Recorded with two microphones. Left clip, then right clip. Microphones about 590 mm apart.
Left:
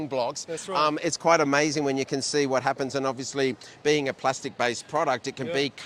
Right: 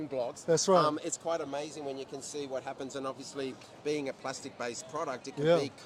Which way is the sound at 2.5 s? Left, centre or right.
Left.